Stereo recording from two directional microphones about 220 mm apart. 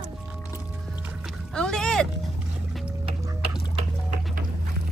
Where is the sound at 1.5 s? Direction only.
5° left (ahead or behind).